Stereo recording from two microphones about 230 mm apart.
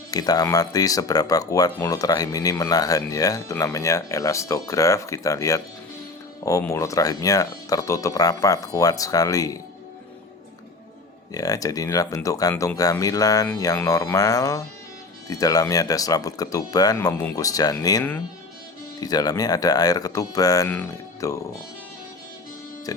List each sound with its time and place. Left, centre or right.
0.1 s speech: centre
11.3 s speech: centre
22.9 s speech: centre